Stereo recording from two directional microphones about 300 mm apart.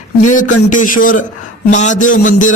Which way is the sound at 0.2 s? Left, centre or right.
Left.